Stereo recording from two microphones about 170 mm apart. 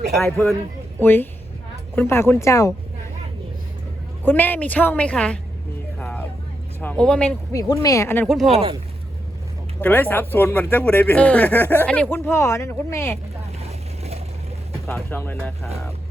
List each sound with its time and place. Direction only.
0.2 s speech: 5° left (ahead or behind); by 2.7 s 20° left (ahead or behind)
4.2 s speech: 10° left (ahead or behind)
6.0 s vehicle: 10° left (ahead or behind)
6.8 s speech: 5° left (ahead or behind)
7.5 s speech: 20° left (ahead or behind)
8.3 s speech: centre (ahead or behind)
8.5 s speech: 35° right (ahead or behind)
9.8 s speech: 10° left (ahead or behind)
13.7 s vehicle: 40° right (ahead or behind)
14.8 s speech: 15° left (ahead or behind)